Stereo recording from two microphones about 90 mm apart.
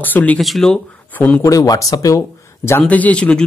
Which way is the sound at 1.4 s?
40° left (ahead or behind).